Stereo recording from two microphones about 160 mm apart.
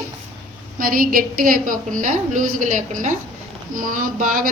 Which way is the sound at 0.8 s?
65° right (ahead or behind).